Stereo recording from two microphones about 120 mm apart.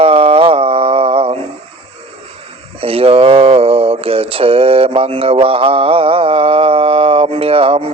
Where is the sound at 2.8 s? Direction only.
55° right (ahead or behind).